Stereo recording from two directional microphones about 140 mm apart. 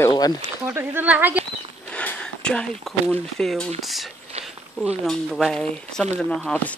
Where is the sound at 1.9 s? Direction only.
10° left (ahead or behind).